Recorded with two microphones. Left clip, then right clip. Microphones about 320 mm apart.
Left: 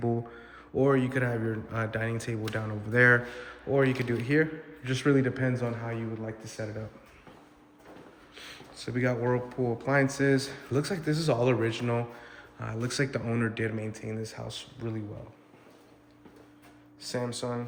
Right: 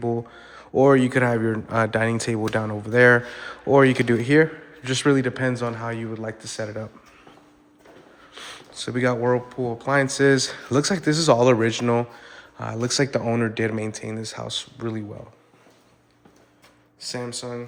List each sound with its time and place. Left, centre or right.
0.0 s speech: centre
8.4 s speech: centre
17.0 s speech: centre